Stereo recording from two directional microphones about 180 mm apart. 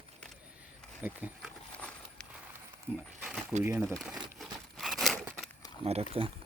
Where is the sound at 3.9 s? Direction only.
Centre (ahead or behind).